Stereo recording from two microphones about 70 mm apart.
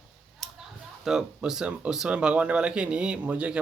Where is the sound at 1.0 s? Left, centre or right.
Centre.